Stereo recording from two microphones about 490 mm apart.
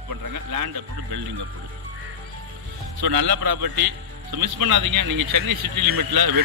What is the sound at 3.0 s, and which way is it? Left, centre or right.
A man's voice, right.